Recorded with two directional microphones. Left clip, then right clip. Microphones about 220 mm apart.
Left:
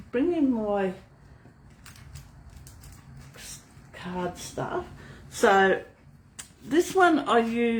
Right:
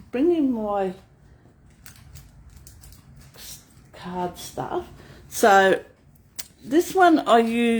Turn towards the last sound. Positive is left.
turn(degrees=-50)  # may be behind; listen again after turning